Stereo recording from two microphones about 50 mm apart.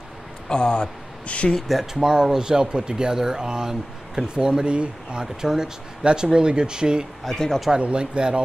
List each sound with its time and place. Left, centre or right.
0.5 s speech: left
1.5 s speech: centre
2.0 s speech: centre
7.2 s speech: centre
7.8 s speech: right